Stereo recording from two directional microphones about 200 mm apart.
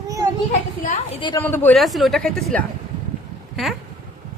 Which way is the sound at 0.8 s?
35° left (ahead or behind).